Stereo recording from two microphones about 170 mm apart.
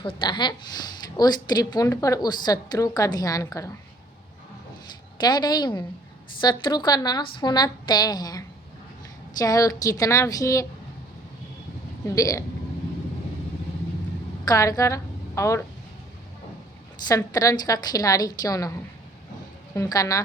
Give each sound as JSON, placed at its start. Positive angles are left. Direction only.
{"t": 0.2, "sound": "a woman's voice", "side_deg": 25}
{"t": 5.2, "sound": "a woman's voice", "side_deg": 25}
{"t": 12.0, "sound": "a woman's voice", "side_deg": 20}
{"t": 14.4, "sound": "a woman's voice", "side_deg": 20}
{"t": 17.2, "sound": "a woman's voice", "side_deg": 20}
{"t": 19.7, "sound": "a woman's voice", "side_deg": 20}